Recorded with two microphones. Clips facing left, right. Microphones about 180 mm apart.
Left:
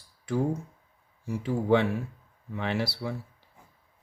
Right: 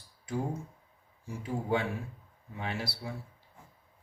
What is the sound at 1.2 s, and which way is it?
Speech, 70° left (ahead or behind).